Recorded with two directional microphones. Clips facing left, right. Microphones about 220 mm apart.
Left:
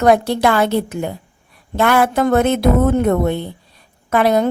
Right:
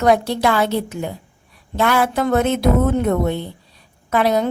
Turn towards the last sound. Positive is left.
turn(degrees=55)  # may be behind; listen again after turning